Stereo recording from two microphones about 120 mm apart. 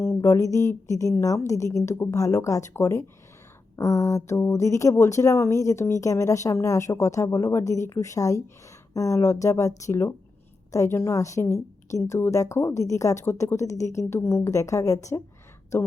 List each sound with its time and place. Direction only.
0.0 s speech: 20° left (ahead or behind)